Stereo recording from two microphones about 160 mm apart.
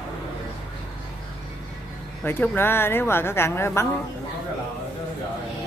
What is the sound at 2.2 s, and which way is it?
A woman's voice, 15° left (ahead or behind).